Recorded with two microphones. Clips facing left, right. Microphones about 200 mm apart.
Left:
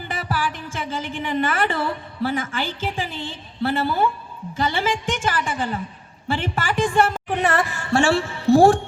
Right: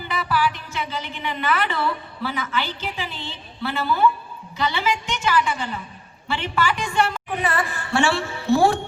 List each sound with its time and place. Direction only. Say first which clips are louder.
0.0 s a woman's voice: right 3 dB; 45° left (ahead or behind)